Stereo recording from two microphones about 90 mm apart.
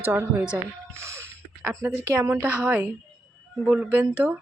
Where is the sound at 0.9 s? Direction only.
30° right (ahead or behind).